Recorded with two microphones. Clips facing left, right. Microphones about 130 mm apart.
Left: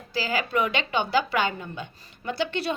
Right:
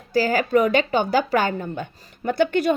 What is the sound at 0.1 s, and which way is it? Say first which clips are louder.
A woman's voice: right 8 dB; 45° right (ahead or behind).